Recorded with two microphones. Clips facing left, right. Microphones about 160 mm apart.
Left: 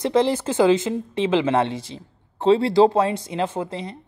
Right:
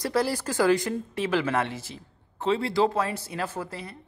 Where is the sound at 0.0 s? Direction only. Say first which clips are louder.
Left 6 dB; 20° left (ahead or behind).